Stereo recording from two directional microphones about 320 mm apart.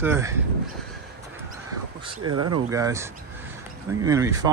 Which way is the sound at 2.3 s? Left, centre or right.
Right.